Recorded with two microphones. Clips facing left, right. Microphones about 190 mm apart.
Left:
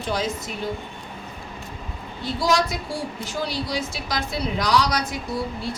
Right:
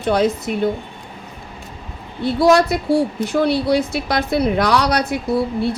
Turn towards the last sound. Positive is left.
turn(degrees=-60)  # may be behind; listen again after turning